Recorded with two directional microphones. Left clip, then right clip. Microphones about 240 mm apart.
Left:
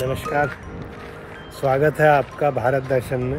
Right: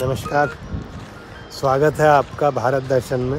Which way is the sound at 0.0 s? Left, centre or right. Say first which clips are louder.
Right 2 dB; centre.